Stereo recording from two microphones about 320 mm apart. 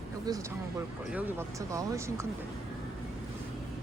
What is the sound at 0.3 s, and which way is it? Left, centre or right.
Speech, centre.